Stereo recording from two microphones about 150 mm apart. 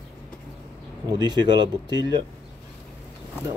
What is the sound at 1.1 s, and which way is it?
Speech, 30° right (ahead or behind).